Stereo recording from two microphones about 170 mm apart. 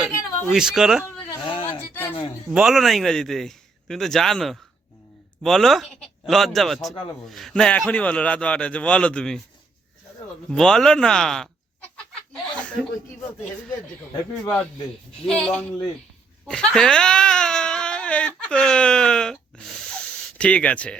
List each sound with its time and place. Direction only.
0.5 s speech: 5° right (ahead or behind)
1.5 s a sound: 35° left (ahead or behind)
2.5 s a man's voice: 5° right (ahead or behind)
10.5 s speech: 5° left (ahead or behind)
12.3 s chuckle: 5° left (ahead or behind)
15.3 s a man's voice: 5° left (ahead or behind)